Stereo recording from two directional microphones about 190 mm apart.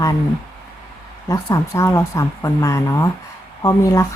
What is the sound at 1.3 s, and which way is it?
Speech, 15° left (ahead or behind).